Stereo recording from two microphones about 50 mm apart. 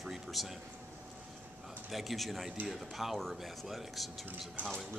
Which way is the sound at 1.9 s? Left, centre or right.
Centre.